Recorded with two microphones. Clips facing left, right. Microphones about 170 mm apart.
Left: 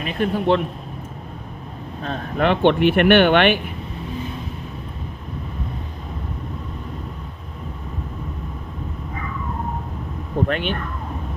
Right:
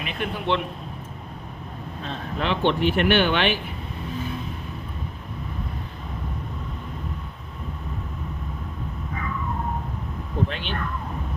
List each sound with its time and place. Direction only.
0.0 s a man's voice: 40° left (ahead or behind)
2.0 s speech: 55° left (ahead or behind)
10.5 s speech: 55° left (ahead or behind)